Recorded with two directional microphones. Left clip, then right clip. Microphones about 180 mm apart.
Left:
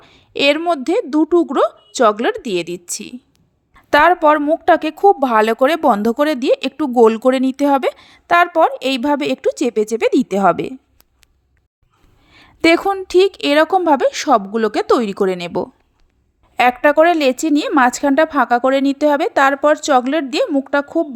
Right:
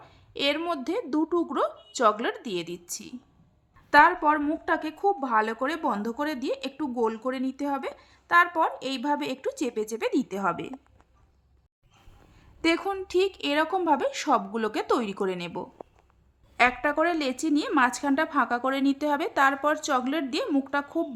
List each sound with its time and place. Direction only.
0.0 s a sound: 40° left (ahead or behind)
0.7 s a woman's voice: 35° left (ahead or behind)
3.8 s a woman's voice: 45° left (ahead or behind)
12.3 s a woman's voice: 45° left (ahead or behind)